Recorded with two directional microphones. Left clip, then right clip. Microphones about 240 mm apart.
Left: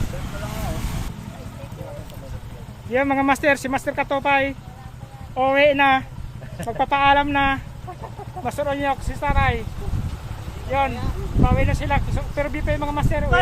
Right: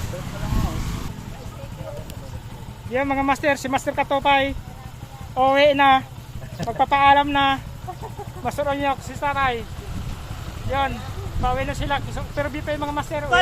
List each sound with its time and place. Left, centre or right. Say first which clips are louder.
2.9 s speech: left 2 dB; centre
3.7 s speech: right 1 dB; centre
10.7 s speech: left 2 dB; centre